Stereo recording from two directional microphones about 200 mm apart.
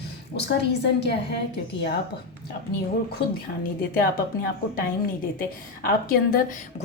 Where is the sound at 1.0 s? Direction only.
55° left (ahead or behind).